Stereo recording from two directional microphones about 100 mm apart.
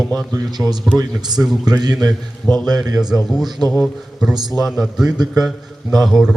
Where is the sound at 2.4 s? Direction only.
20° left (ahead or behind).